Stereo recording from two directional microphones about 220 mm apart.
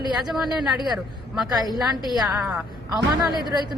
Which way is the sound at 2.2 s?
5° right (ahead or behind).